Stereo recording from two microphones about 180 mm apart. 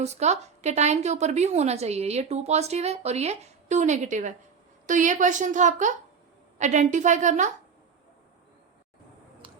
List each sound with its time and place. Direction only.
0.0 s a woman's voice: 40° right (ahead or behind)
9.4 s finger snapping: 30° right (ahead or behind)